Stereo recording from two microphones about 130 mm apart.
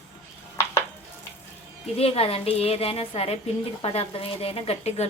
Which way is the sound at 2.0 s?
50° left (ahead or behind).